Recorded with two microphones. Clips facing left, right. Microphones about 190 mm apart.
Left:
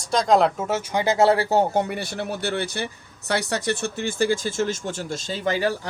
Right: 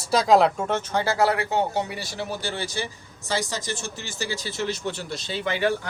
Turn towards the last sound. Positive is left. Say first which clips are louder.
# left 1 dB
turn(degrees=40)  # may be behind; listen again after turning